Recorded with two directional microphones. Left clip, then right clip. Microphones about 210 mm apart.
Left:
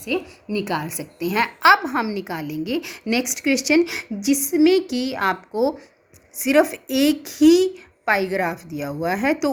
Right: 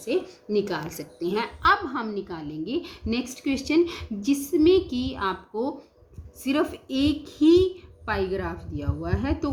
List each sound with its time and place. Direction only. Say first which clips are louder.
0.6 s a woman's voice: left 4 dB; 50° left (ahead or behind)